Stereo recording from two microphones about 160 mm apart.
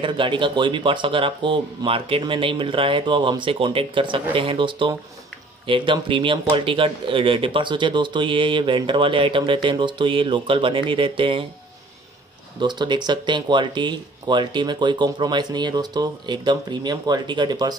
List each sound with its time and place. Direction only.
0.0 s speech: 30° right (ahead or behind)
12.5 s speech: 30° right (ahead or behind)